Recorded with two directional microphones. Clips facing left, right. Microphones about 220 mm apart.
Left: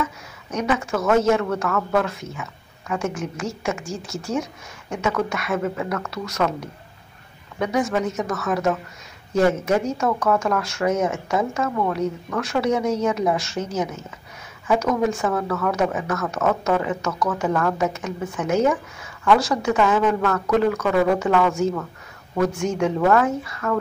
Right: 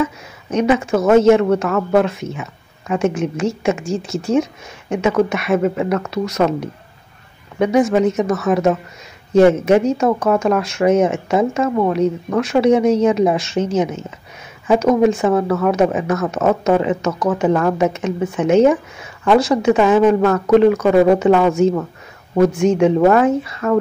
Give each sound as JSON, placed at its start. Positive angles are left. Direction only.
{"t": 0.0, "sound": "speech", "side_deg": -20}